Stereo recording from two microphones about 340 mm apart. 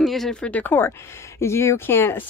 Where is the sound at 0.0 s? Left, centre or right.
Centre.